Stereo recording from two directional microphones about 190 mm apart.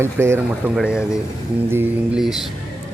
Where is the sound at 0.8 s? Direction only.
5° right (ahead or behind).